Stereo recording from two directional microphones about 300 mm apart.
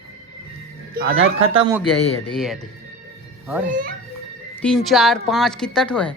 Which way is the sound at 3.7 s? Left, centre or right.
Right.